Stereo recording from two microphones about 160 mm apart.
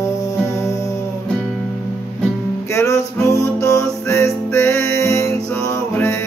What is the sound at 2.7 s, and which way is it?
Music, 20° left (ahead or behind).